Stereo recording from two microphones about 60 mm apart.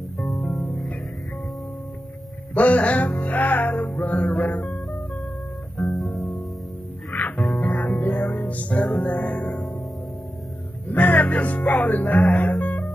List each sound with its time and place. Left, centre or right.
2.5 s music: left
5.8 s guitar: centre
7.2 s music: left
10.9 s music: left